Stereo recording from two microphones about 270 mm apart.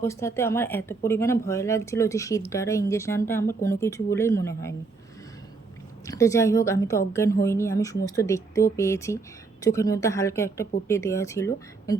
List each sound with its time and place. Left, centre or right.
0.0 s speech: centre
6.1 s speech: centre